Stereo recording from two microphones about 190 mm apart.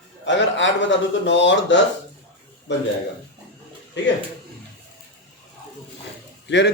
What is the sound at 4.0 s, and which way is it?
Speech, 70° left (ahead or behind).